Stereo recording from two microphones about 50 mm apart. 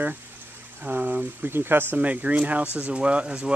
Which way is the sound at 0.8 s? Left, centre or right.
Right.